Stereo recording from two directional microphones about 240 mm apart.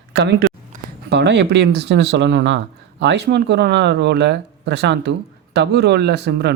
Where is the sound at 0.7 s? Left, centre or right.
Right.